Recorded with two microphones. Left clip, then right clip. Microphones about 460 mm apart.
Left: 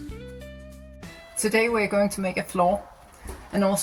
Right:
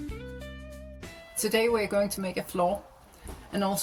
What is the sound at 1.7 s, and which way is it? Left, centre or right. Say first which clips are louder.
Speech: left 3 dB; right.